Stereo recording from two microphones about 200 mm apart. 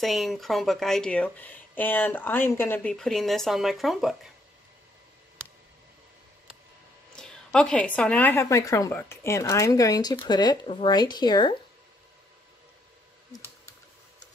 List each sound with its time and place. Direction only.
0.0 s speech: centre (ahead or behind)
7.1 s a woman's voice: 5° left (ahead or behind); by 11.5 s 20° left (ahead or behind)